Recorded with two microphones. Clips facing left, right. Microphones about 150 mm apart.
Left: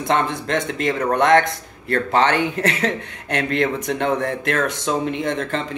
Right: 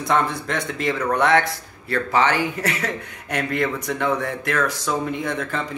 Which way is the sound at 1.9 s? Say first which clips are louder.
Left 2 dB; 55° left (ahead or behind).